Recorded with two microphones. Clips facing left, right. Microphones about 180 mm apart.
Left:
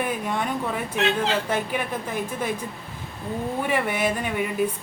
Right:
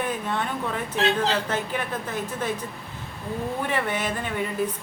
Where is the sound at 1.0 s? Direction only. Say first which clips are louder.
Right 1 dB; 35° right (ahead or behind).